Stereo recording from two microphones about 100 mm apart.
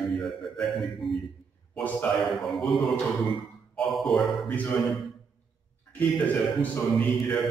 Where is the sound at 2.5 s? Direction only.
Centre (ahead or behind).